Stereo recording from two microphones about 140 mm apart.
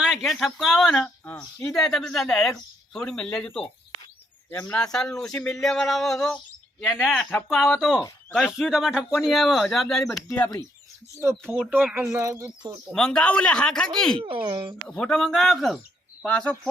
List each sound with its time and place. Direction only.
0.0 s speech: 5° right (ahead or behind)
1.0 s speech: 15° left (ahead or behind)
1.7 s speech: centre (ahead or behind)
6.8 s speech: 5° right (ahead or behind)
7.3 s speech: 10° left (ahead or behind)
7.5 s speech: centre (ahead or behind)
11.4 s speech: 5° left (ahead or behind)
11.7 s speech: 15° right (ahead or behind)
12.9 s speech: 5° left (ahead or behind)
14.2 s speech: 40° right (ahead or behind)
14.8 s speech: 5° left (ahead or behind)